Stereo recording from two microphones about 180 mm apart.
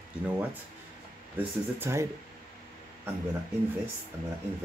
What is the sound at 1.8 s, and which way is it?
Speech, 15° right (ahead or behind).